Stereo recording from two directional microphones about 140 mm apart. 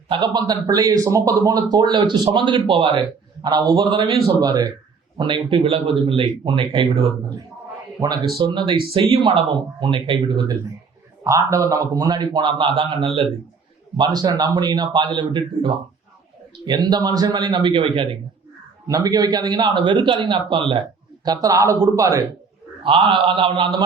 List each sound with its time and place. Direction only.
0.1 s a man's voice: 30° right (ahead or behind)
8.4 s a man's voice: 35° right (ahead or behind)
11.2 s a man's voice: 20° right (ahead or behind); by 13.2 s 40° right (ahead or behind)
13.9 s a man's voice: 30° right (ahead or behind)
18.9 s a man's voice: 25° right (ahead or behind)
21.2 s a man's voice: 25° right (ahead or behind)
22.8 s a man's voice: 40° right (ahead or behind)